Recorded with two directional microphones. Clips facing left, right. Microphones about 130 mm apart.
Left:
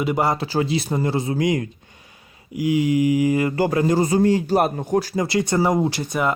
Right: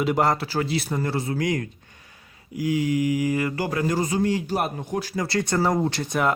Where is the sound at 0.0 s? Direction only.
Centre (ahead or behind).